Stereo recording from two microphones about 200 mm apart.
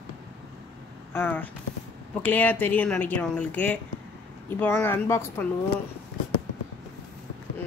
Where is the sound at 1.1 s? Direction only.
10° left (ahead or behind).